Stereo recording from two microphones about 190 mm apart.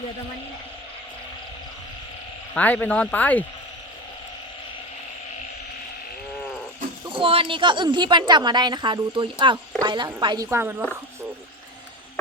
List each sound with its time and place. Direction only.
2.6 s speech: 10° left (ahead or behind)
7.0 s speech: 25° right (ahead or behind); by 10.8 s 10° right (ahead or behind)